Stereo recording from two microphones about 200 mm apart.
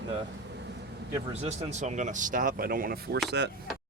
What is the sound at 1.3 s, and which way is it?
Speech, 30° right (ahead or behind).